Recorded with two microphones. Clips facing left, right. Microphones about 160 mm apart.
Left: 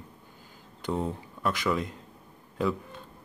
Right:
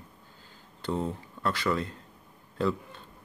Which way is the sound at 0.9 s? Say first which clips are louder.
Left 1 dB; centre (ahead or behind).